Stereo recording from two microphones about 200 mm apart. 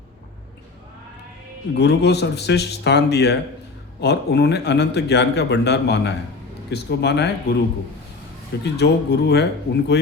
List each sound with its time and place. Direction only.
1.7 s a man's voice: 60° left (ahead or behind)
8.6 s a man's voice: 55° left (ahead or behind)